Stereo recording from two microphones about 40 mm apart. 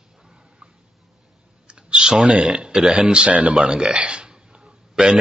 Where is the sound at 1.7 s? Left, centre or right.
Right.